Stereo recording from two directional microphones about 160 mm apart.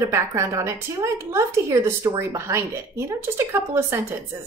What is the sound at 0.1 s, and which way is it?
A woman's voice, 20° right (ahead or behind).